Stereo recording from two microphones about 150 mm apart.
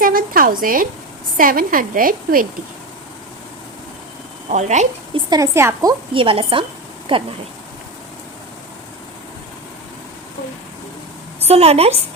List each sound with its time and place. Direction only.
0.0 s a sound: 70° right (ahead or behind)
1.4 s a woman's voice: 70° right (ahead or behind)
4.4 s a woman's voice: 50° right (ahead or behind)
5.1 s a woman's voice: 25° right (ahead or behind)
6.1 s a woman's voice: 35° right (ahead or behind)
11.4 s a woman's voice: 45° right (ahead or behind)